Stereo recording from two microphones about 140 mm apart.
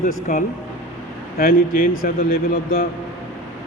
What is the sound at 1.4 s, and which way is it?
A man's voice, 90° left.